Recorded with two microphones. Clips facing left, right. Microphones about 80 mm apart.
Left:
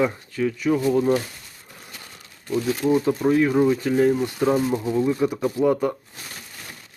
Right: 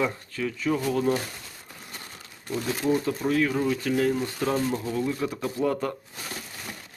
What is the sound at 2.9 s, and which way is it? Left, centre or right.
Speech, centre.